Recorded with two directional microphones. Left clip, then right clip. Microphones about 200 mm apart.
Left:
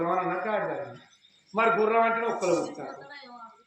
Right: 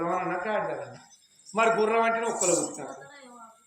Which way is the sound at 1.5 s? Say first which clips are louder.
Even; 5° left (ahead or behind).